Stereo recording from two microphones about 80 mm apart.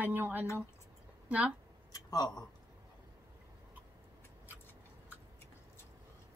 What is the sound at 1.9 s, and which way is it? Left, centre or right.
Speech, left.